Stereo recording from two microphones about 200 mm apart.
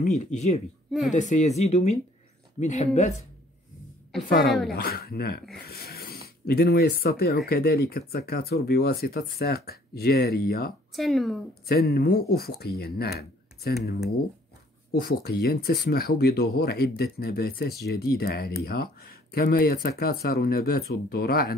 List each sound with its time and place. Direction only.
0.2 s speech: 35° left (ahead or behind)
4.4 s speech: centre (ahead or behind)
4.7 s speech: 50° left (ahead or behind)
10.9 s speech: centre (ahead or behind)
11.6 s speech: 50° left (ahead or behind)
14.9 s speech: 50° left (ahead or behind)